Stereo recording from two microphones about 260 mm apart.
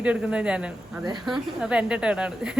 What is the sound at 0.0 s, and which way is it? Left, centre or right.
Speech, centre.